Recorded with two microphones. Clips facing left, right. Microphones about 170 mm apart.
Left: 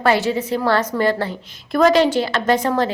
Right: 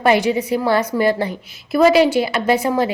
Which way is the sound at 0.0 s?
15° right (ahead or behind).